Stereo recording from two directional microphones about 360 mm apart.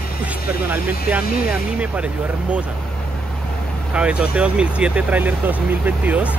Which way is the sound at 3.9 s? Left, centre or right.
Centre.